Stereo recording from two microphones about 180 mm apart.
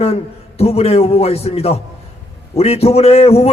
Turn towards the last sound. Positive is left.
turn(degrees=35)  # may be behind; listen again after turning